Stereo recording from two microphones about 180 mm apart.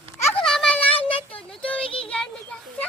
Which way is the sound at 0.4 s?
5° left (ahead or behind).